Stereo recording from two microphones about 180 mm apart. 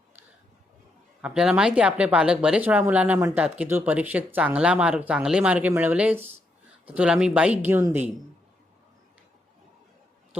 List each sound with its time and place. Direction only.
1.2 s speech: 5° right (ahead or behind)
3.4 s speech: 5° right (ahead or behind)